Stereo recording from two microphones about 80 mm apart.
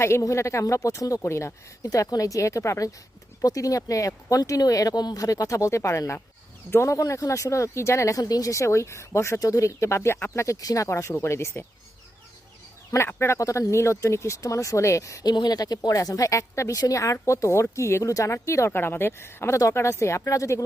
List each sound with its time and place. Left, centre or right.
0.0 s speech: left
1.8 s speech: left
13.1 s speech: left
15.2 s speech: left